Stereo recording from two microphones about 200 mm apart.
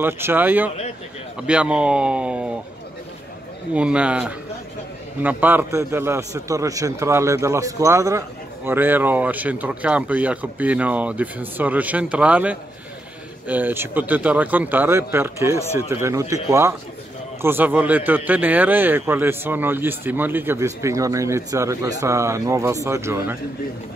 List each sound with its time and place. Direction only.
0.0 s a man's voice: 10° right (ahead or behind)
3.7 s a man's voice: 5° right (ahead or behind)